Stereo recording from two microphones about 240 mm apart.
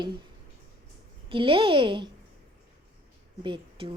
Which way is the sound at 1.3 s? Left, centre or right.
Right.